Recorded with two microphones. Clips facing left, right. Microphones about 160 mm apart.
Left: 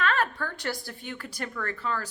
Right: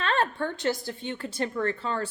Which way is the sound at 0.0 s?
30° right (ahead or behind).